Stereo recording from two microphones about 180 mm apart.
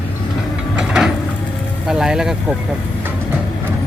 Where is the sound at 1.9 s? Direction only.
5° right (ahead or behind).